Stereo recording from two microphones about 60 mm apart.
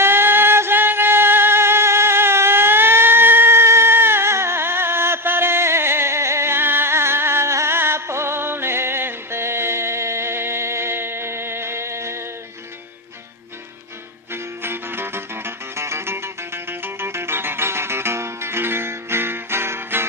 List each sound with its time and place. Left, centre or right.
0.0 s music: right
14.3 s music: right